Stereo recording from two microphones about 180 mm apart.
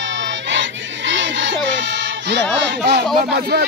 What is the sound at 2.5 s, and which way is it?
Speech, 75° right (ahead or behind).